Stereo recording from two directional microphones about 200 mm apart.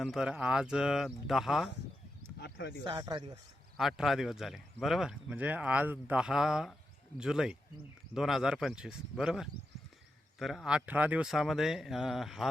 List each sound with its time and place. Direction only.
0.0 s speech: centre (ahead or behind)
2.4 s a sound: 60° left (ahead or behind)
2.8 s speech: 20° right (ahead or behind)
3.8 s speech: centre (ahead or behind)